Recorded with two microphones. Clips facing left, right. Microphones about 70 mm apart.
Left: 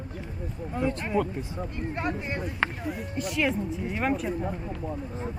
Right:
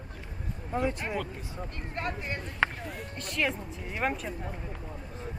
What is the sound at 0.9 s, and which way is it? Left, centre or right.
Speech, centre.